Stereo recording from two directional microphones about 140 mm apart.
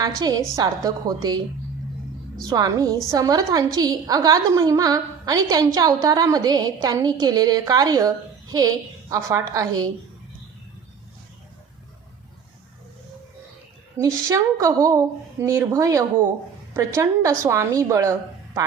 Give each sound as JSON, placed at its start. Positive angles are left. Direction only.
{"t": 0.2, "sound": "a woman's voice", "side_deg": -25}
{"t": 2.4, "sound": "a woman's voice", "side_deg": -25}
{"t": 13.9, "sound": "a woman's voice", "side_deg": -25}